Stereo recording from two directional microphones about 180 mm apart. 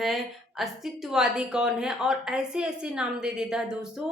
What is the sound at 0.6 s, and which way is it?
A woman's voice, centre (ahead or behind).